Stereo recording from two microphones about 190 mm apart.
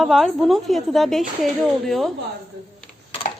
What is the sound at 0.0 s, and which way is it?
A woman's voice, centre (ahead or behind).